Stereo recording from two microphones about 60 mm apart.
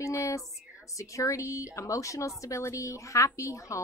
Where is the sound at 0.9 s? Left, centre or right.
Left.